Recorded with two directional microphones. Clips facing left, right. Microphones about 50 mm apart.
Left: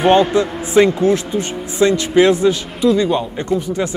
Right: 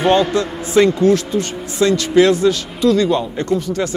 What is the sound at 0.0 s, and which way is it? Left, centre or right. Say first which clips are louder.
Speech: left 2 dB; left.